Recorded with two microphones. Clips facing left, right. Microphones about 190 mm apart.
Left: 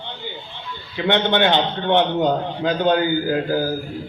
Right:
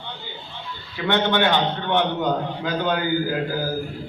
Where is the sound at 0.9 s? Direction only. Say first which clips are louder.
Left 2 dB; 20° left (ahead or behind).